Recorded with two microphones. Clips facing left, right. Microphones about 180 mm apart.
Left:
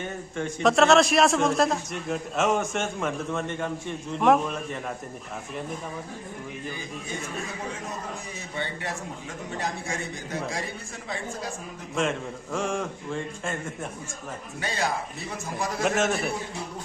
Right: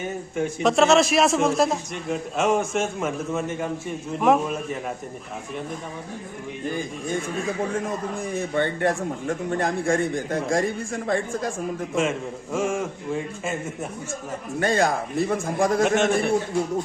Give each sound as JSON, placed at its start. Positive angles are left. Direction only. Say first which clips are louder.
{"t": 0.0, "sound": "a man's voice", "louder": "right 5 dB", "side_deg": -10}
{"t": 8.3, "sound": "a man's voice", "louder": "right 14 dB", "side_deg": -55}
{"t": 11.9, "sound": "a man's voice", "louder": "right 1 dB", "side_deg": -5}
{"t": 14.6, "sound": "a man's voice", "louder": "right 8 dB", "side_deg": -50}
{"t": 15.8, "sound": "a man's voice", "louder": "even", "side_deg": 0}